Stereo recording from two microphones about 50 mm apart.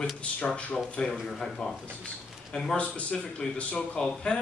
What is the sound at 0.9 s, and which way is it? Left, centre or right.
Speech, centre.